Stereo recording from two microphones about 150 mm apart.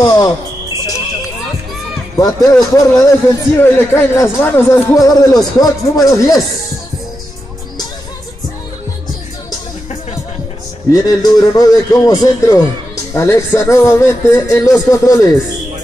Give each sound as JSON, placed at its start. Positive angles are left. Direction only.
{"t": 0.0, "sound": "cricket", "side_deg": 25}
{"t": 2.1, "sound": "speech", "side_deg": 25}
{"t": 10.9, "sound": "speech", "side_deg": 25}